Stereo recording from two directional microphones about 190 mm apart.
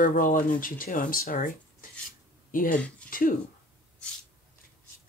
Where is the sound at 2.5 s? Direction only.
45° left (ahead or behind).